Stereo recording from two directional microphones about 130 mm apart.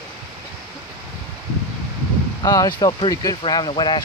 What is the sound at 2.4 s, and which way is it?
Speech, 30° left (ahead or behind).